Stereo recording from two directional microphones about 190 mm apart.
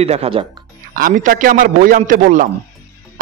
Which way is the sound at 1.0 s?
45° right (ahead or behind).